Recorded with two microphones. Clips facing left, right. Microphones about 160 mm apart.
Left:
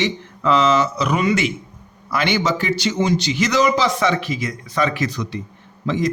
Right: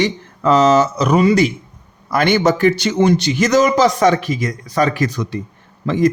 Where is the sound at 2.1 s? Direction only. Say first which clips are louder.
Right 5 dB; 45° right (ahead or behind).